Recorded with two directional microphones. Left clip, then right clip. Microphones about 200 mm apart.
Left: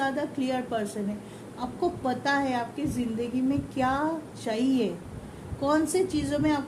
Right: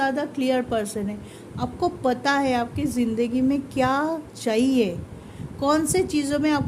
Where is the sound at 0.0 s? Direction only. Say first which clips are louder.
Right 5 dB; 55° right (ahead or behind).